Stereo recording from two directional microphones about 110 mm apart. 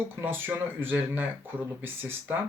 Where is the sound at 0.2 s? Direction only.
20° right (ahead or behind).